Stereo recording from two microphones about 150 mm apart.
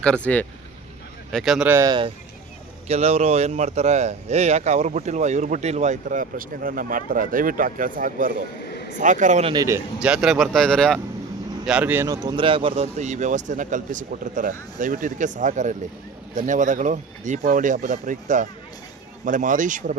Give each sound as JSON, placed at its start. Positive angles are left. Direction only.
{"t": 0.0, "sound": "speech", "side_deg": 10}
{"t": 1.6, "sound": "speech", "side_deg": -15}
{"t": 1.9, "sound": "a man's voice", "side_deg": -35}
{"t": 2.8, "sound": "speech", "side_deg": -45}
{"t": 9.4, "sound": "a man's voice", "side_deg": -30}
{"t": 10.0, "sound": "speech", "side_deg": -5}
{"t": 11.6, "sound": "speech", "side_deg": -10}
{"t": 12.0, "sound": "speech", "side_deg": -25}